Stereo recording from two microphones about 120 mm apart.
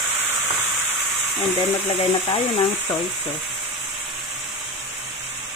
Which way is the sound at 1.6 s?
60° left (ahead or behind).